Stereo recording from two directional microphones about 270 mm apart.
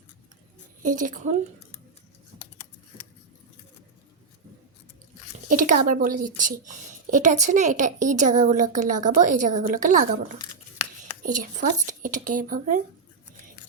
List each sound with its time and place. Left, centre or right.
0.8 s a woman's voice: right
5.5 s a woman's voice: right
11.2 s a woman's voice: right